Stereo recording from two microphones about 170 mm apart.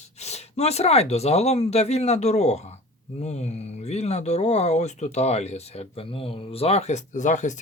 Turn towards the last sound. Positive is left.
turn(degrees=45)  # may be behind; listen again after turning